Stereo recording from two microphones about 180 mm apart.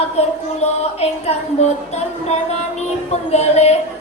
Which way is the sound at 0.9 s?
35° left (ahead or behind).